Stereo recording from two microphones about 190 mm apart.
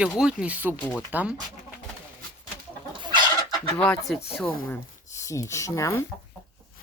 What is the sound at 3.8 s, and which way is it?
Speech, 5° left (ahead or behind).